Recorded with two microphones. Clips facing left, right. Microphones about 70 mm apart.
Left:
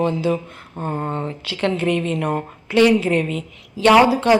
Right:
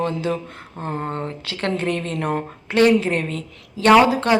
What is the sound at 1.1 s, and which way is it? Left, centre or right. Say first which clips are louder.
A woman's voice: left 2 dB; right.